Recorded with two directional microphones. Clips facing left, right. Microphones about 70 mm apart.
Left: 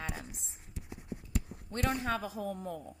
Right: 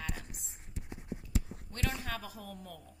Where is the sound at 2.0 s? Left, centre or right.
Left.